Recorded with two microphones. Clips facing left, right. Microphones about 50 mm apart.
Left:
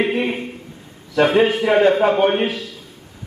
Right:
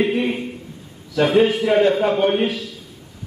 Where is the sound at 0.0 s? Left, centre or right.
Centre.